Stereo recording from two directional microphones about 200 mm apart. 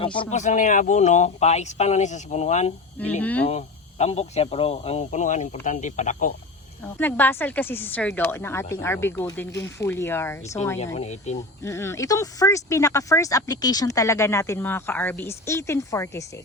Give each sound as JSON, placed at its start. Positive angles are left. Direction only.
{"t": 0.0, "sound": "speech", "side_deg": 25}
{"t": 3.0, "sound": "speech", "side_deg": 10}
{"t": 3.4, "sound": "speech", "side_deg": 30}
{"t": 6.9, "sound": "speech", "side_deg": 10}
{"t": 10.9, "sound": "speech", "side_deg": 35}
{"t": 11.6, "sound": "speech", "side_deg": 15}